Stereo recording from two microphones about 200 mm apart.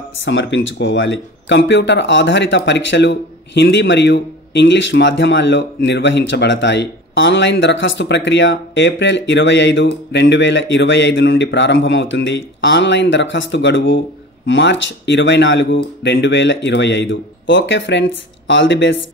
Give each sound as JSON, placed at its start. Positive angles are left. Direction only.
{"t": 0.2, "sound": "speech", "side_deg": 65}